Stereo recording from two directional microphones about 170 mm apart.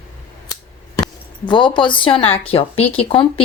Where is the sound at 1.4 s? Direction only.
25° left (ahead or behind).